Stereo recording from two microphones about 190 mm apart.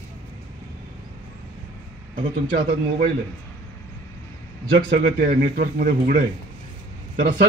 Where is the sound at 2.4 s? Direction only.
50° right (ahead or behind).